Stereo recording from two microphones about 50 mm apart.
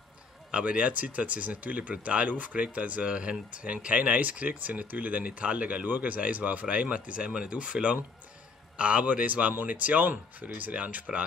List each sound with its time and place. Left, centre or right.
0.5 s speech: right